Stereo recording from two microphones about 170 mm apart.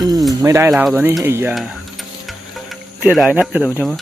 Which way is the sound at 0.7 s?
Centre (ahead or behind).